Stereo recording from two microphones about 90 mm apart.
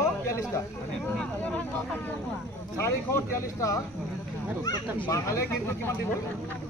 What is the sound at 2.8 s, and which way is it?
Speech, 30° left (ahead or behind).